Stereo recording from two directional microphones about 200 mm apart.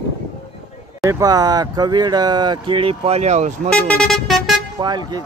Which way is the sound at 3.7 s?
5° left (ahead or behind).